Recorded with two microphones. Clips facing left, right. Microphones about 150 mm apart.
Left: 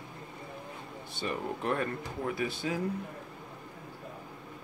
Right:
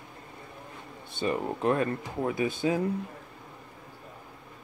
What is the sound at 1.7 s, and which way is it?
Speech, 20° right (ahead or behind).